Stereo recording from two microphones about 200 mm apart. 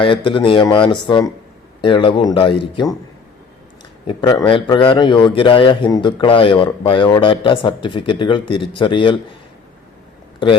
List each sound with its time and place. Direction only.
0.0 s a man's voice: 25° left (ahead or behind)
4.0 s a man's voice: 20° left (ahead or behind)